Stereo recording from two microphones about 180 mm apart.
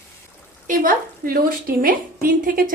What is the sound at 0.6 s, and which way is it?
A woman's voice, 50° right (ahead or behind).